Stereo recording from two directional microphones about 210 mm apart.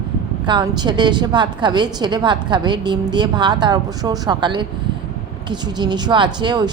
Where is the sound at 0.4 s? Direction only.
20° right (ahead or behind).